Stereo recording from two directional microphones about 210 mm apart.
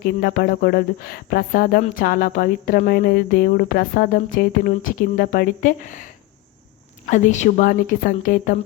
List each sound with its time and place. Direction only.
0.0 s a woman's voice: 45° left (ahead or behind)